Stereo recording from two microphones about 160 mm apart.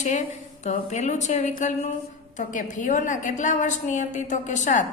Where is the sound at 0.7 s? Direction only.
45° left (ahead or behind).